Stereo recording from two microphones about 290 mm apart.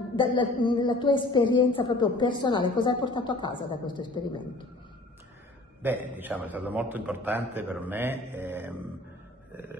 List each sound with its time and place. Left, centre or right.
0.1 s a woman's voice: centre
5.8 s a man's voice: centre